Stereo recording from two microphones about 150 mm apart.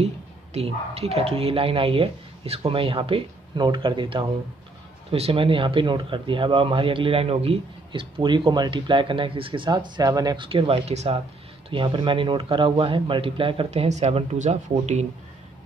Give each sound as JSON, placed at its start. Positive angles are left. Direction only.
{"t": 0.0, "sound": "speech", "side_deg": -45}